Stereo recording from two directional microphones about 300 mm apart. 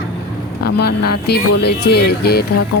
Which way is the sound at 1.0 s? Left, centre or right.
Left.